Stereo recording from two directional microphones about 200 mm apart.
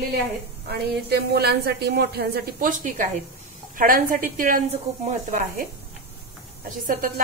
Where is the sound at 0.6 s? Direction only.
55° right (ahead or behind).